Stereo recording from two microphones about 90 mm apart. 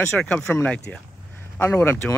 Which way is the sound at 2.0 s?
10° left (ahead or behind).